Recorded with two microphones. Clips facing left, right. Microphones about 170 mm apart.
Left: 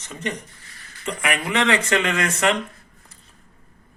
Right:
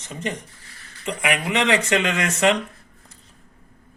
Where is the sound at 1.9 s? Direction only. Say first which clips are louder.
Even; 25° right (ahead or behind).